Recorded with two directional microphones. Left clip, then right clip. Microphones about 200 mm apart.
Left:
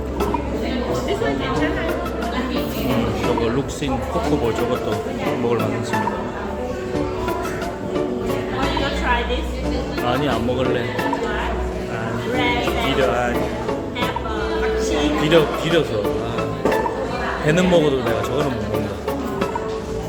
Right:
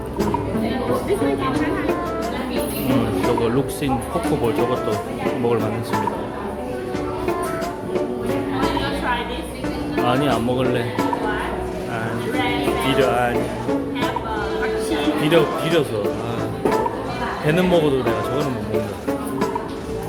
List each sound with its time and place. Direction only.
10.1 s speech: 15° right (ahead or behind)
13.0 s speech: 15° right (ahead or behind)
15.2 s speech: 5° right (ahead or behind)
17.4 s a man's voice: 10° right (ahead or behind)